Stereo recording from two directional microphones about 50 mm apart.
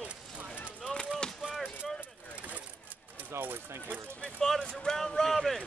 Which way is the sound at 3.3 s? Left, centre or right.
Right.